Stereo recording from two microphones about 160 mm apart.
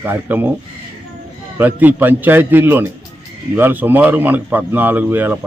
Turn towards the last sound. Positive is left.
turn(degrees=-10)  # may be behind; listen again after turning